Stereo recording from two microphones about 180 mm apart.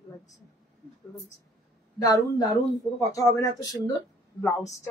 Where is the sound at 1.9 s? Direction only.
20° left (ahead or behind).